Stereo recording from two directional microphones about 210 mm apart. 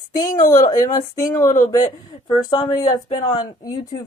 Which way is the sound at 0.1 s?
15° left (ahead or behind).